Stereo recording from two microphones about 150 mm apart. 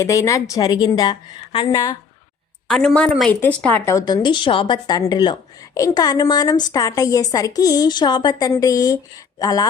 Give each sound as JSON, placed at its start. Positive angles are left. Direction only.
{"t": 0.0, "sound": "a woman's voice", "side_deg": 20}
{"t": 2.6, "sound": "speech", "side_deg": 5}